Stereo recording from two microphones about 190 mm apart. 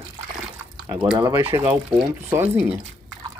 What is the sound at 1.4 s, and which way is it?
Speech, 10° right (ahead or behind).